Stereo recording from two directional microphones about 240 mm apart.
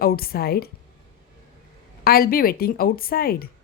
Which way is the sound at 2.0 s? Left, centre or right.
Left.